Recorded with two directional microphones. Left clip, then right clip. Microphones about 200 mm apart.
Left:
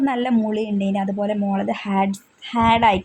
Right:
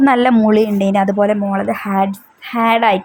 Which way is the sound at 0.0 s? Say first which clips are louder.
Right 9 dB; 20° right (ahead or behind).